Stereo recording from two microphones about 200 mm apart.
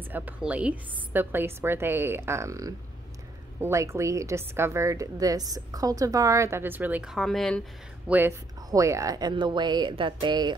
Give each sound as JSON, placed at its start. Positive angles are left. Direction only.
{"t": 0.1, "sound": "a woman's voice", "side_deg": -5}
{"t": 8.1, "sound": "speech", "side_deg": -10}